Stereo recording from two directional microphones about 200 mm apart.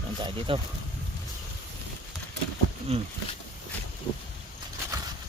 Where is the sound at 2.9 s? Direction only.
30° right (ahead or behind).